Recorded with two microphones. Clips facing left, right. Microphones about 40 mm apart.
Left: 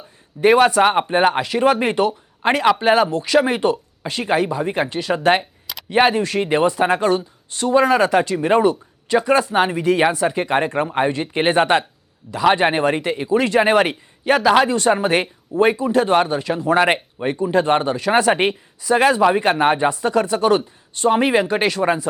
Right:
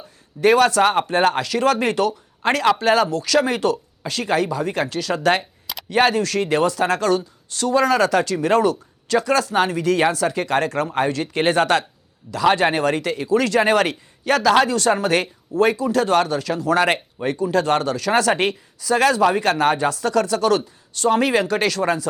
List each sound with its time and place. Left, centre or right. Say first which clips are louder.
0.4 s speech: left 2 dB; centre